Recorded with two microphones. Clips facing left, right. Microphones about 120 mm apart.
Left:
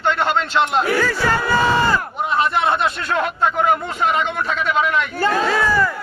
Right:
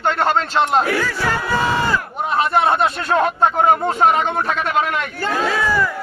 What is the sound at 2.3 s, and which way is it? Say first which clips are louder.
Speech: right 2 dB; 45° right (ahead or behind).